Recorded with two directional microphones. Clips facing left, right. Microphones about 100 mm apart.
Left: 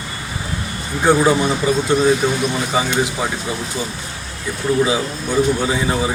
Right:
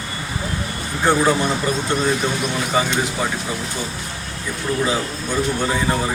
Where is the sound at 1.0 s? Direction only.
5° left (ahead or behind).